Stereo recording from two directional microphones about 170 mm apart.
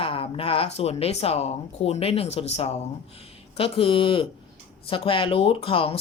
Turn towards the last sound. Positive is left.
turn(degrees=30)  # may be behind; listen again after turning